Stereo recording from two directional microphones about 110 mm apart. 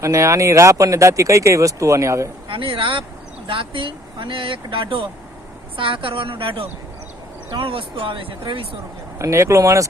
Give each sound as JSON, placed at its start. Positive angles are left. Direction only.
{"t": 0.0, "sound": "speech", "side_deg": -25}
{"t": 2.5, "sound": "speech", "side_deg": -55}
{"t": 9.1, "sound": "speech", "side_deg": -25}